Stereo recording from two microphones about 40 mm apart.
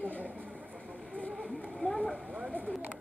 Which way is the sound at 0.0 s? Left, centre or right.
Left.